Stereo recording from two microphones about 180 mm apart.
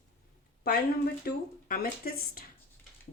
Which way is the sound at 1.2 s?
55° left (ahead or behind).